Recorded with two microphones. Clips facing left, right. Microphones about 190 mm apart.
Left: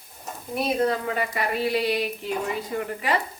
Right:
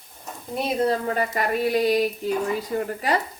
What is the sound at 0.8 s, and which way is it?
Speech, 40° right (ahead or behind).